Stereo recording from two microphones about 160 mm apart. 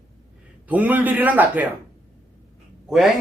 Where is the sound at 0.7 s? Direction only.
10° right (ahead or behind).